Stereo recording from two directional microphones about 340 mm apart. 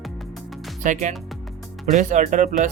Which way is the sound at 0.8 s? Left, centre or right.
Right.